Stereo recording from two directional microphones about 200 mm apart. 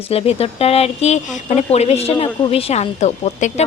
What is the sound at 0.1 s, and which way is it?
Speech, 30° left (ahead or behind).